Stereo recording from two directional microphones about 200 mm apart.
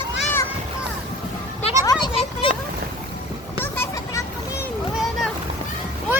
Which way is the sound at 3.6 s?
15° left (ahead or behind).